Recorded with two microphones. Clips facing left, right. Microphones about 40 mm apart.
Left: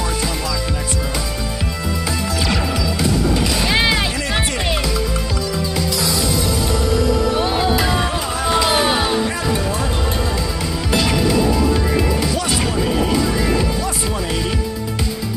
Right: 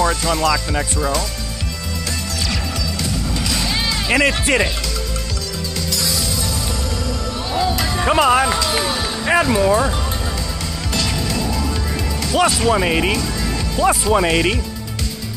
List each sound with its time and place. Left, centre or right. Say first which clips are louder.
0.0 s music: right 5 dB; centre
2.5 s music: left 4 dB; centre
7.7 s music: left 4 dB; centre
8.1 s music: right 7 dB; right
8.5 s music: left 4 dB; left
9.5 s music: right 5 dB; right
10.9 s music: left 5 dB; centre
12.8 s speech: even; right
13.2 s music: left 5 dB; centre
14.1 s speech: right 7 dB; right